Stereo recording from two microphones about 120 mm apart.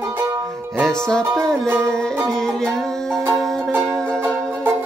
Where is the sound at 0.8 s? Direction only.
5° left (ahead or behind).